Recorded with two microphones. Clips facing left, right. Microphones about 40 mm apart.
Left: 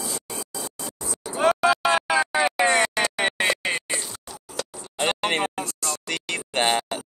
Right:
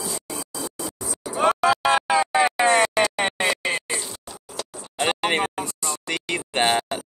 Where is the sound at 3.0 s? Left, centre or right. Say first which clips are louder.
Right 2 dB; centre.